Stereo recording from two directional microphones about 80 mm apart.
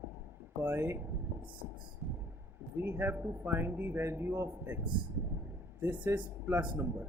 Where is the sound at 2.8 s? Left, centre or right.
Right.